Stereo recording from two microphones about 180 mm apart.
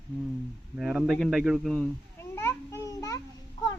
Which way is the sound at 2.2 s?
15° left (ahead or behind).